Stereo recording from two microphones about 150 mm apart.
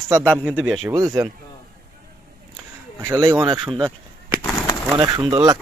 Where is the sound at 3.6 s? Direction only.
Centre (ahead or behind).